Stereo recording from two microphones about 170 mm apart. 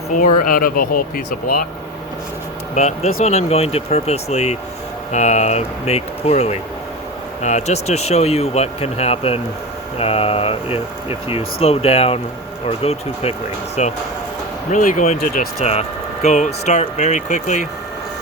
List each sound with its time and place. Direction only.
0.1 s speech: 55° left (ahead or behind)
2.7 s speech: 40° left (ahead or behind)
14.7 s speech: 50° left (ahead or behind)